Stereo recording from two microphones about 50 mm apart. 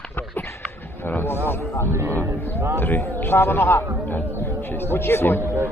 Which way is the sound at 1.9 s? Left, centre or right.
Right.